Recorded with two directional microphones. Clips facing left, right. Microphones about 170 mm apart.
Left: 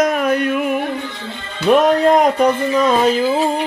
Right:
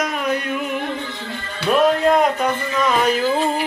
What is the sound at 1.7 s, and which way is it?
Speech, 40° left (ahead or behind).